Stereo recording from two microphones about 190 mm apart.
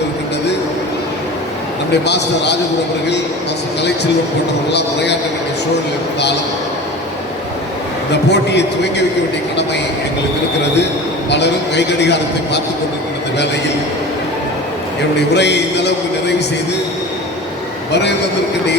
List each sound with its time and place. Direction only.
2.0 s speech: 65° left (ahead or behind)
4.7 s speech: 65° left (ahead or behind)
8.1 s speech: 65° left (ahead or behind)
11.3 s speech: 65° left (ahead or behind)
15.3 s speech: 65° left (ahead or behind)